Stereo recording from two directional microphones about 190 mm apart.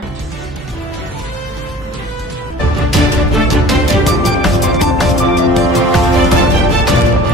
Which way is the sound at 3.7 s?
Centre (ahead or behind).